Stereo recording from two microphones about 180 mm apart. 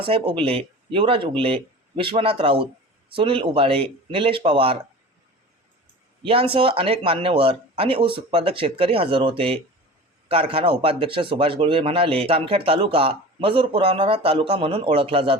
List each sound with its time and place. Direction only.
0.0 s speech: 30° right (ahead or behind)
6.2 s speech: 30° right (ahead or behind)